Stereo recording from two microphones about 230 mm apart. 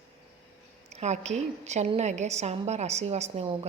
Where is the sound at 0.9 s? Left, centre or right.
Right.